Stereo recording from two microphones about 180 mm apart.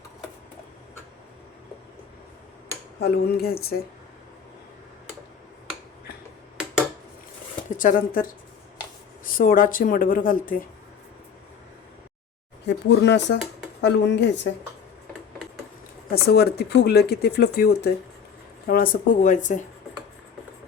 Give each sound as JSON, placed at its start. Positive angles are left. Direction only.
{"t": 3.0, "sound": "speech", "side_deg": 60}
{"t": 7.8, "sound": "speech", "side_deg": 50}
{"t": 12.6, "sound": "speech", "side_deg": 75}
{"t": 16.2, "sound": "speech", "side_deg": 60}
{"t": 18.7, "sound": "speech", "side_deg": 50}